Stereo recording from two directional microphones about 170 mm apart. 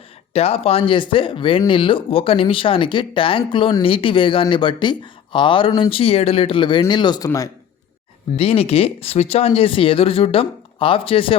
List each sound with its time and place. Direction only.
0.3 s speech: 35° left (ahead or behind); by 7.5 s 20° left (ahead or behind)
8.4 s speech: 35° left (ahead or behind)